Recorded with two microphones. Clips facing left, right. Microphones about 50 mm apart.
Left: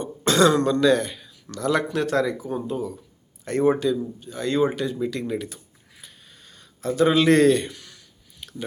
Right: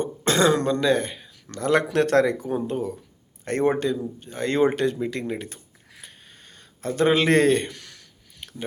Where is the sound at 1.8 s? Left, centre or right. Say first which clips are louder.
Right 3 dB; right.